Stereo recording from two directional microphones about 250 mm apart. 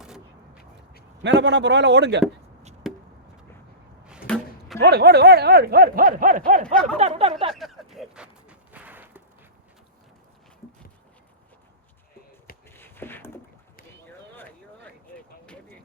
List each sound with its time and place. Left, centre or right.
0.0 s vehicle: centre
1.2 s a man's voice: right
2.8 s chop: centre
4.3 s chop: centre
4.8 s speech: right
7.5 s a sound: centre
12.7 s a sound: centre